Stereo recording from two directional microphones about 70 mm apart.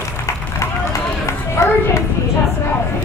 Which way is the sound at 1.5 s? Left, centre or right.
Left.